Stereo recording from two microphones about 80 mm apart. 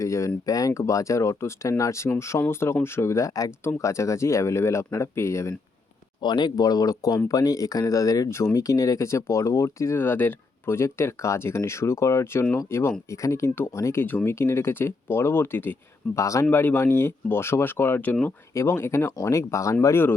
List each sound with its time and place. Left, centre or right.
0.0 s speech: left
6.2 s speech: left
14.0 s speech: left
16.1 s speech: left; by 18.3 s centre
18.5 s speech: left